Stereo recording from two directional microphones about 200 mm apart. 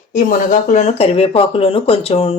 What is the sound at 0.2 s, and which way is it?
Speech, 40° left (ahead or behind).